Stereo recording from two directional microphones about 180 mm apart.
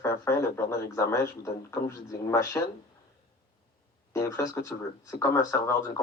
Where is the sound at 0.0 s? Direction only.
15° left (ahead or behind).